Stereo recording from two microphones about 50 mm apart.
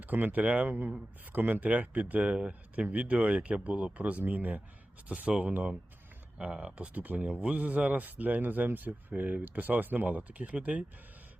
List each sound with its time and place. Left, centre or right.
0.0 s speech: right